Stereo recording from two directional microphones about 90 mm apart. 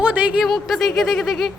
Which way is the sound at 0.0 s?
15° right (ahead or behind).